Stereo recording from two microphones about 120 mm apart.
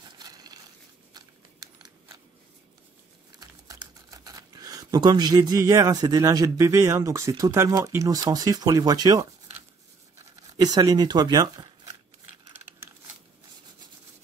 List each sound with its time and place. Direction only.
0.2 s crushing: 35° right (ahead or behind)
1.8 s scissors: 30° right (ahead or behind)
3.3 s a sound: 30° right (ahead or behind)
6.2 s speech: 30° right (ahead or behind)
10.6 s speech: 30° right (ahead or behind)